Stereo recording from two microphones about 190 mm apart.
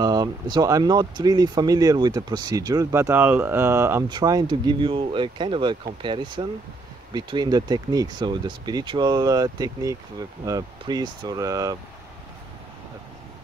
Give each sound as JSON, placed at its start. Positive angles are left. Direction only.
{"t": 0.0, "sound": "speech", "side_deg": -20}